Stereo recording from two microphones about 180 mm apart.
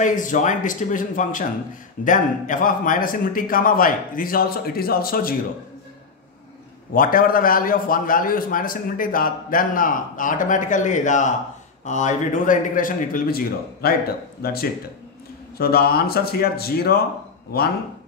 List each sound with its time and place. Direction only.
0.0 s a man's voice: 45° left (ahead or behind)
6.9 s a man's voice: 50° left (ahead or behind)